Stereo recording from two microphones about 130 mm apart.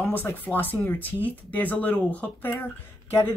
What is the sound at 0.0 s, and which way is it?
Speech, 15° left (ahead or behind).